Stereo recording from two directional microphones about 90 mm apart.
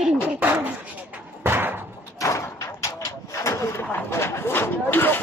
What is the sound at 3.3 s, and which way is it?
Vehicle, 30° left (ahead or behind).